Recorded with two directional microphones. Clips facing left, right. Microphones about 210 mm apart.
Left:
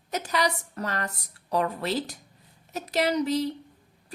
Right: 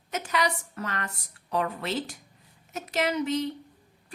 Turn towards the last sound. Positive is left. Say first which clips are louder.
# left 2 dB
turn(degrees=35)  # may be behind; listen again after turning